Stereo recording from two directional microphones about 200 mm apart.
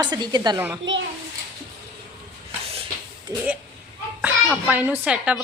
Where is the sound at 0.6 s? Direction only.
10° right (ahead or behind).